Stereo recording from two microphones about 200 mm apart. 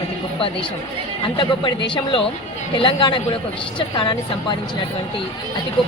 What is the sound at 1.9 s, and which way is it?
Speech, 25° left (ahead or behind).